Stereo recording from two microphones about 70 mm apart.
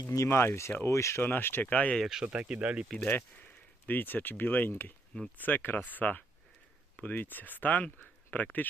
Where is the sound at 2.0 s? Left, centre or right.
Centre.